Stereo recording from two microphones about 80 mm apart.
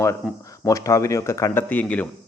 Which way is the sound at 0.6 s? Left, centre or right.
Left.